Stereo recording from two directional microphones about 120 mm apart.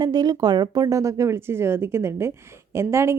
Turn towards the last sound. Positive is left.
turn(degrees=-20)  # may be behind; listen again after turning